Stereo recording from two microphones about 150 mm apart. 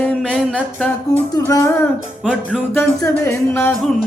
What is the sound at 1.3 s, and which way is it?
Music, 20° left (ahead or behind).